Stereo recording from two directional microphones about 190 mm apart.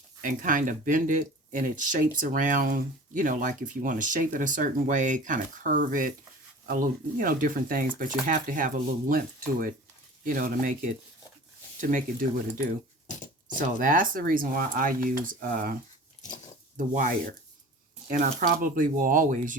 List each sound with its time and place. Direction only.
0.2 s speech: 45° right (ahead or behind)
13.6 s speech: 45° right (ahead or behind)
16.7 s speech: 45° right (ahead or behind)